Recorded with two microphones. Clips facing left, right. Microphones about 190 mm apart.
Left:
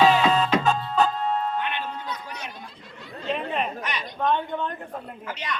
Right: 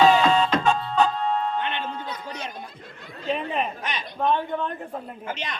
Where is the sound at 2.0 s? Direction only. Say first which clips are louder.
Right 1 dB; 30° right (ahead or behind).